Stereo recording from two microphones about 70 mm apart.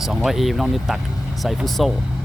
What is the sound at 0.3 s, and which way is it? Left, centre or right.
Speech, centre.